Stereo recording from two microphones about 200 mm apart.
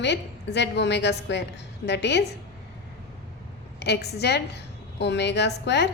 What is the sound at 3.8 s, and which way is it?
A woman's voice, 55° left (ahead or behind).